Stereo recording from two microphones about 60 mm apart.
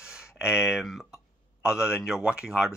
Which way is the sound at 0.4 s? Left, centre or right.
Centre.